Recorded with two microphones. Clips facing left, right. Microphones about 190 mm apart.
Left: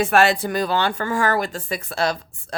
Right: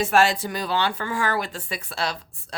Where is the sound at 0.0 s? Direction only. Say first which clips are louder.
Left 3 dB; 60° left (ahead or behind).